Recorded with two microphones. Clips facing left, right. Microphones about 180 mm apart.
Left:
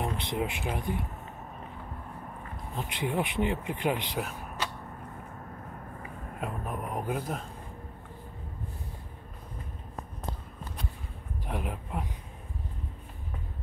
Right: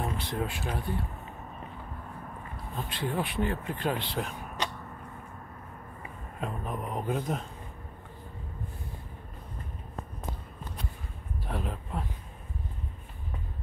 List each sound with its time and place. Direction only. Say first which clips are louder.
0.0 s speech: left 1 dB; 20° left (ahead or behind)
2.7 s speech: left 1 dB; 20° left (ahead or behind)
4.6 s a sound: right 2 dB; 5° left (ahead or behind)
6.4 s speech: right 1 dB; 5° left (ahead or behind)
11.4 s speech: even; 15° left (ahead or behind)